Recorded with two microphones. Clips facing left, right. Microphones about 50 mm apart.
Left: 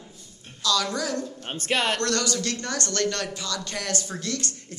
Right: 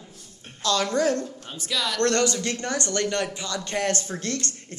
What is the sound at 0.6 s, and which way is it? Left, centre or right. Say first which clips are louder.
Speech: right 3 dB; right.